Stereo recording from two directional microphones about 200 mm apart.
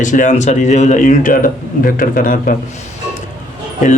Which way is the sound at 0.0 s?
40° left (ahead or behind).